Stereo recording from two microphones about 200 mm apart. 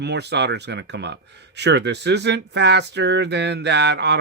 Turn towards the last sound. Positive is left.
turn(degrees=-60)  # may be behind; listen again after turning